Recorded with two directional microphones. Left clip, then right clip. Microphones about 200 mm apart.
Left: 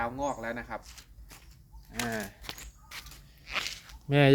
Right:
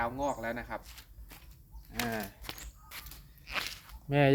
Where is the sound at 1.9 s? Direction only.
10° left (ahead or behind).